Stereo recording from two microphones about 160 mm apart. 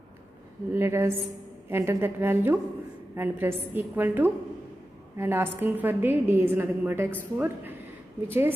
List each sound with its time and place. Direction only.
0.7 s a woman's voice: 15° right (ahead or behind)